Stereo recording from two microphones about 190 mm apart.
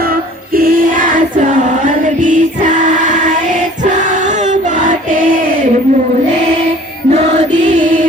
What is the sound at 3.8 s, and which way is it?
Choir, 40° right (ahead or behind).